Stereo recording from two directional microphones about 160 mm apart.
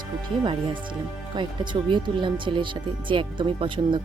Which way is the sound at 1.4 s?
30° right (ahead or behind).